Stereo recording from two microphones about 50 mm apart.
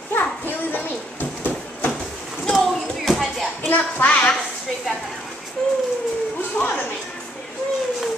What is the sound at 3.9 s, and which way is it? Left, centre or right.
Speech, left.